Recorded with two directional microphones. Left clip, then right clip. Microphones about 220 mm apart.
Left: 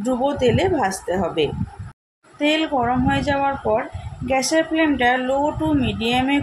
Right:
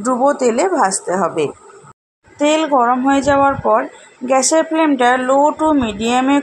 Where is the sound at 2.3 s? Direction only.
25° right (ahead or behind).